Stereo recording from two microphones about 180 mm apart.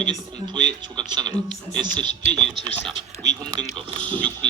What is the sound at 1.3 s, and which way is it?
Speech, 5° left (ahead or behind).